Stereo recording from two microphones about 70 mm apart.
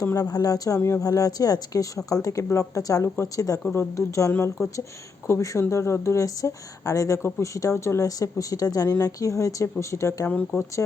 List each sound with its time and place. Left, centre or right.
0.0 s speech: left
0.3 s speech: left
0.8 s speech: left
1.0 s speech: left
2.4 s speech: left
4.3 s speech: left
7.2 s speech: left
7.5 s speech: left
10.2 s speech: left